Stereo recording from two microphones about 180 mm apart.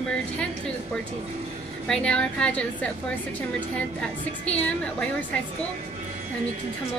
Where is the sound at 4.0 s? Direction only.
5° left (ahead or behind).